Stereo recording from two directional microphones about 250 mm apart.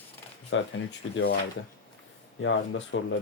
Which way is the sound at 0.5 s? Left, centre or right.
Left.